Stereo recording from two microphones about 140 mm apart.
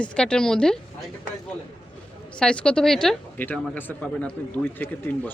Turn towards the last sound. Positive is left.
turn(degrees=10)  # may be behind; listen again after turning